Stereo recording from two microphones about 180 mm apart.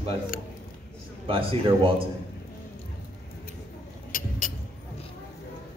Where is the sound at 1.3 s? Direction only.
30° right (ahead or behind).